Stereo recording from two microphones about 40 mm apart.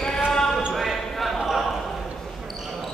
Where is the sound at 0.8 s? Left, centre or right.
Centre.